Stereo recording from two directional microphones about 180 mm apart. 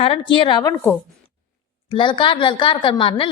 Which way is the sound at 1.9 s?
30° left (ahead or behind).